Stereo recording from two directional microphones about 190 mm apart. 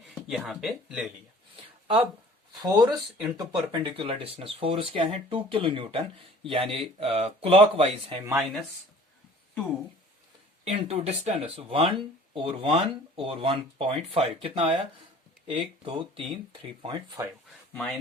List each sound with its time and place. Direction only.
0.1 s speech: centre (ahead or behind)
2.6 s speech: 20° right (ahead or behind)
3.7 s speech: 25° right (ahead or behind)
8.4 s speech: centre (ahead or behind)
10.7 s speech: 35° right (ahead or behind)